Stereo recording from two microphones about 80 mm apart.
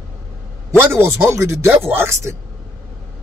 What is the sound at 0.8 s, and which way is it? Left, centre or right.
Speech, right.